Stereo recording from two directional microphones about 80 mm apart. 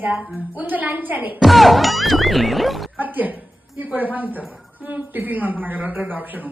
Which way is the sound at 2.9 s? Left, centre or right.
Right.